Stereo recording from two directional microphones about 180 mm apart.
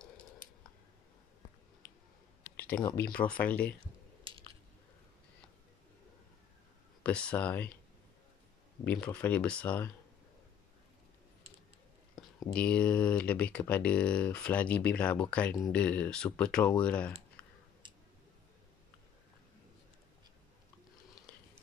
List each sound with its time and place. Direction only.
2.5 s a sound: 10° left (ahead or behind)
3.2 s speech: 5° left (ahead or behind)
7.0 s speech: 5° left (ahead or behind)
9.0 s speech: 5° left (ahead or behind)
12.2 s a sound: centre (ahead or behind)
12.5 s speech: 5° left (ahead or behind)